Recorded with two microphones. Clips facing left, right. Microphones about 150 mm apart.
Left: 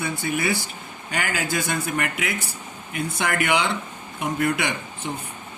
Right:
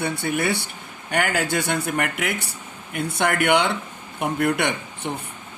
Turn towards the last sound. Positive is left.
turn(degrees=-60)  # may be behind; listen again after turning